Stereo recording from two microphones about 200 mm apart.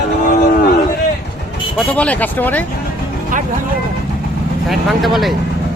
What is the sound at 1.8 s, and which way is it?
Speech, 5° left (ahead or behind).